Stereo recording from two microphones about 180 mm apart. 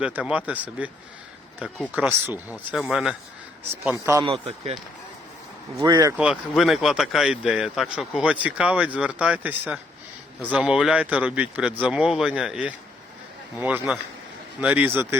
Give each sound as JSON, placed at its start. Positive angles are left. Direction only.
{"t": 0.0, "sound": "speech", "side_deg": -5}
{"t": 1.9, "sound": "speech", "side_deg": -10}
{"t": 3.8, "sound": "speech", "side_deg": -15}
{"t": 4.3, "sound": "speech", "side_deg": -30}
{"t": 6.1, "sound": "speech", "side_deg": -5}